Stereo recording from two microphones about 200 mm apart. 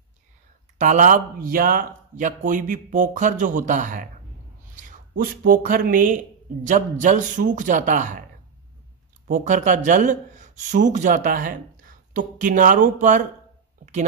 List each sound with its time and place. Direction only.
0.7 s speech: 40° right (ahead or behind)
5.1 s speech: 45° right (ahead or behind)
9.3 s speech: 40° right (ahead or behind)